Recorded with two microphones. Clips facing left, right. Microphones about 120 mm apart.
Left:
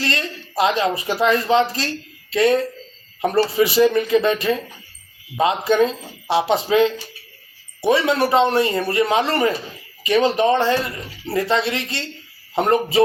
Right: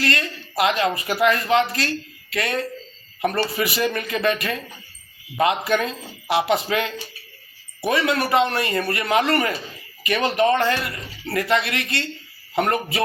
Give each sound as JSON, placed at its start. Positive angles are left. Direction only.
{"t": 0.0, "sound": "a man's voice", "side_deg": 30}
{"t": 3.8, "sound": "speech", "side_deg": 20}